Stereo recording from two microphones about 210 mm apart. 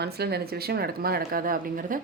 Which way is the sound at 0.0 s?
50° right (ahead or behind).